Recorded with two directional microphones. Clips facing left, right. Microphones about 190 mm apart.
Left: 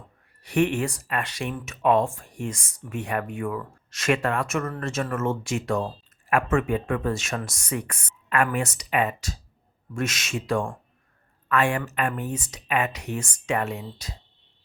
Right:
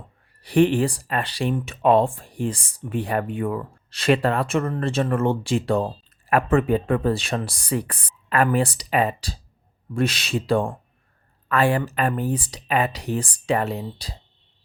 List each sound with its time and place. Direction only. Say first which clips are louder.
0.4 s speech: right 5 dB; 35° right (ahead or behind)